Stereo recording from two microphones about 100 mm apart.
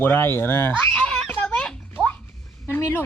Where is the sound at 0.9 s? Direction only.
10° left (ahead or behind).